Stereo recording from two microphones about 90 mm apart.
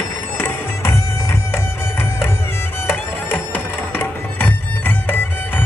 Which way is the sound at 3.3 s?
25° left (ahead or behind).